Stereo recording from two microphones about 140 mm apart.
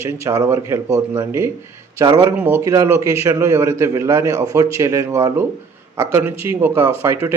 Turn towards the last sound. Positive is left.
turn(degrees=-20)  # may be behind; listen again after turning